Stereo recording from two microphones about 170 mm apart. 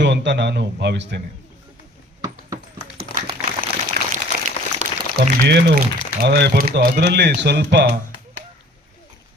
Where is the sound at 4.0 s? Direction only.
65° right (ahead or behind).